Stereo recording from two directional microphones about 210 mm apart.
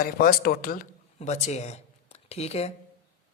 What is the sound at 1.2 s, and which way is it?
Speech, 30° left (ahead or behind).